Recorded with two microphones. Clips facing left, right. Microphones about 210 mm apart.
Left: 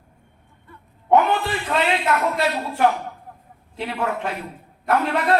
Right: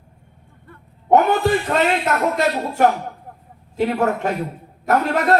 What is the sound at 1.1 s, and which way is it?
Speech, 45° right (ahead or behind).